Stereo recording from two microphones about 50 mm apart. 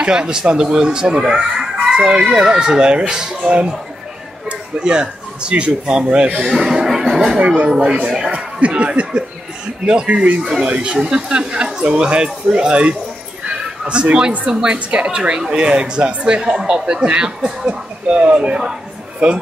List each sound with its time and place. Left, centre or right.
0.0 s speech: centre
6.0 s speech: right
6.4 s speech: centre
7.3 s speech: right
10.4 s speech: centre
10.7 s speech: right
13.5 s a sound: centre
14.5 s speech: centre